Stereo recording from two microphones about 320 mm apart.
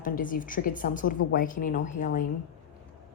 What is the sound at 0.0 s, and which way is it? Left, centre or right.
A woman's voice, left.